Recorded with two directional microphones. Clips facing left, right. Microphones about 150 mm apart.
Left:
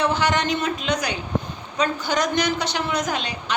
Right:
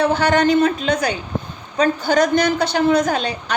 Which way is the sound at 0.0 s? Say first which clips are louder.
Right 6 dB; 55° right (ahead or behind).